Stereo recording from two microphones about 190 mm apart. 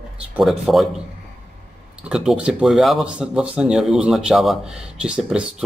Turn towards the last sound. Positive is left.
turn(degrees=-5)  # may be behind; listen again after turning